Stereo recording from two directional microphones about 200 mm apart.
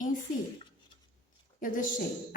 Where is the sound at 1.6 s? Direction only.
45° left (ahead or behind).